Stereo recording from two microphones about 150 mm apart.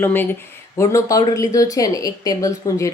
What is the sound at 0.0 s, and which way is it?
Speech, 15° left (ahead or behind).